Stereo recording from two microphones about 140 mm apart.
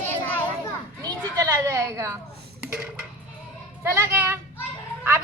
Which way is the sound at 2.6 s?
5° right (ahead or behind).